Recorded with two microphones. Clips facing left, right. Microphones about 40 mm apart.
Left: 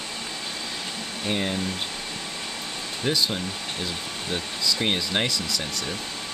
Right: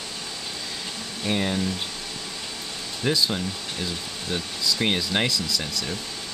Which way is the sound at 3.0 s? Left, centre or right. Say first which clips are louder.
Right 1 dB; centre.